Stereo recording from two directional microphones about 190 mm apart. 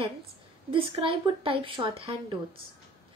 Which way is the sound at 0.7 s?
30° right (ahead or behind).